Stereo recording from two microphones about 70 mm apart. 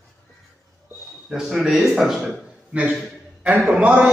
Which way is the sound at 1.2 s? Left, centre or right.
Centre.